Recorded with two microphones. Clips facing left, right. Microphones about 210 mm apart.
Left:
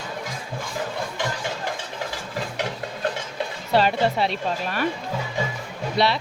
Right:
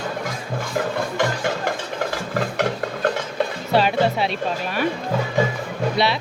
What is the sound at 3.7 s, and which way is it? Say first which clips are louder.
Speech: right 1 dB; 10° right (ahead or behind).